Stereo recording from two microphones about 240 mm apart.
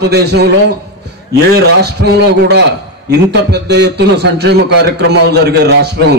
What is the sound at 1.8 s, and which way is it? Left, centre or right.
A man's voice, right.